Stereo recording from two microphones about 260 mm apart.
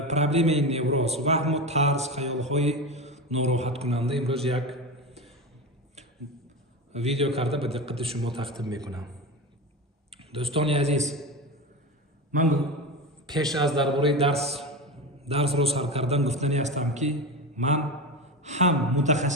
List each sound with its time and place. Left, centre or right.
0.1 s a man's voice: right
4.5 s a man's voice: centre
6.9 s a man's voice: right
8.5 s a man's voice: centre
10.2 s speech: right
13.2 s a man's voice: centre
13.5 s a man's voice: centre
14.2 s a man's voice: right
14.6 s a sound: centre
15.2 s a man's voice: right